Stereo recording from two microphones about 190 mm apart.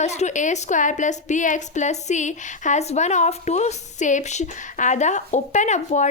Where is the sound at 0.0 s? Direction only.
35° left (ahead or behind).